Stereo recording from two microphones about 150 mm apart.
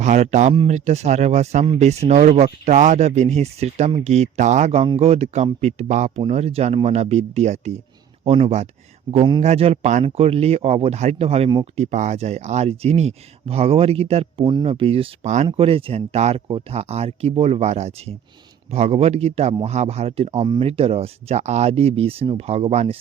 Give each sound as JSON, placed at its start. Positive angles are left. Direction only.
{"t": 0.0, "sound": "speech", "side_deg": -50}
{"t": 9.1, "sound": "speech", "side_deg": -30}
{"t": 9.4, "sound": "speech", "side_deg": -45}
{"t": 15.4, "sound": "speech", "side_deg": -40}